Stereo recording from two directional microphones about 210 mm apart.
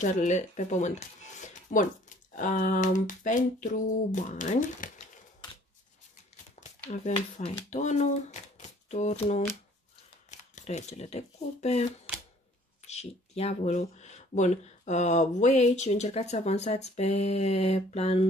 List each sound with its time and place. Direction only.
0.0 s speech: 35° left (ahead or behind)
6.6 s a sound: 35° left (ahead or behind)
7.4 s speech: 35° left (ahead or behind)
12.8 s speech: 30° left (ahead or behind)